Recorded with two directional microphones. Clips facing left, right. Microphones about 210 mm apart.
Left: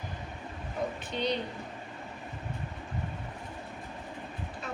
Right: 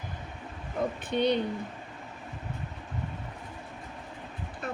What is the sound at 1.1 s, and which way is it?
Speech, 60° right (ahead or behind).